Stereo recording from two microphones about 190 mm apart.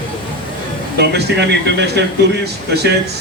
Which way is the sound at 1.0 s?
60° right (ahead or behind).